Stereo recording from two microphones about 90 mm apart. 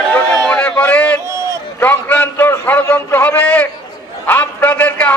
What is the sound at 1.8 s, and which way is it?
A man's voice, 20° left (ahead or behind).